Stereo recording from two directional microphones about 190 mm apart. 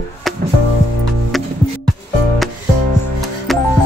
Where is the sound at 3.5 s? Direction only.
Centre (ahead or behind).